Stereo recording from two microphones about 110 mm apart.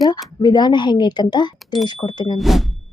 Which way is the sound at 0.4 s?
40° left (ahead or behind).